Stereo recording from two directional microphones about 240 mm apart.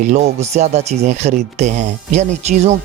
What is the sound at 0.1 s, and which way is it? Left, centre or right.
Speech, right.